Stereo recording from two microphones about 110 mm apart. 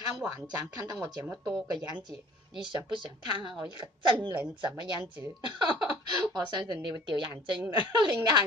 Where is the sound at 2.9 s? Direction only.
45° right (ahead or behind).